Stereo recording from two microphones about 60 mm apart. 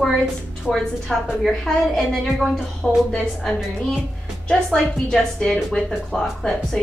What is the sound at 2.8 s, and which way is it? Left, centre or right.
A woman's voice, centre.